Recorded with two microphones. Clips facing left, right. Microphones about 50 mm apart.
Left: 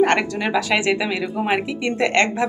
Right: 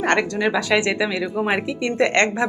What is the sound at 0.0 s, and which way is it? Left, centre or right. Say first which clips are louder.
Speech: left 1 dB; centre.